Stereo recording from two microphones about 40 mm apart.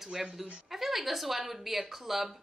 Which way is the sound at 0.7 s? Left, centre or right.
Centre.